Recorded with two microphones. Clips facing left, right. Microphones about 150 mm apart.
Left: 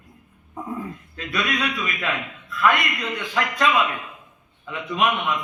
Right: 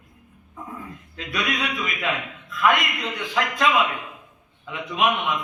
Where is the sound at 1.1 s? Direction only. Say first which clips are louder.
Left 1 dB; 15° right (ahead or behind).